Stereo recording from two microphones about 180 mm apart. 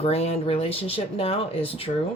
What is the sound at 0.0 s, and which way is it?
Speech, 35° left (ahead or behind).